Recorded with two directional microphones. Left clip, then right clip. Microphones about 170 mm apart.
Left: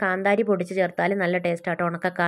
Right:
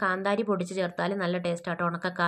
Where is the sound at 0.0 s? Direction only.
25° left (ahead or behind).